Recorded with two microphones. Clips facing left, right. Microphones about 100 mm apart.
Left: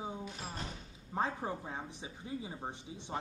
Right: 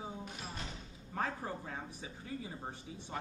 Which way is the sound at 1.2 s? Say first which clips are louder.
Left 3 dB; 20° left (ahead or behind).